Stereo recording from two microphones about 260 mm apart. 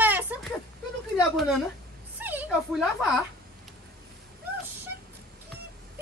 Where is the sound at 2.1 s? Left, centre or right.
Centre.